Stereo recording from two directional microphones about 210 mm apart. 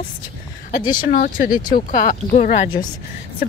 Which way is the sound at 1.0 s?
40° left (ahead or behind).